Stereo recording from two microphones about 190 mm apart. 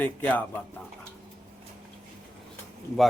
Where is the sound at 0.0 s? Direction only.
10° left (ahead or behind).